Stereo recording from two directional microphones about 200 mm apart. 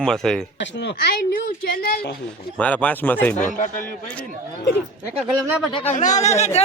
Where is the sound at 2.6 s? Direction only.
5° left (ahead or behind).